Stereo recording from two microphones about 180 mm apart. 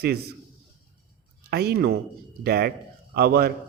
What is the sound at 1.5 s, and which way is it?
A man's voice, 60° right (ahead or behind).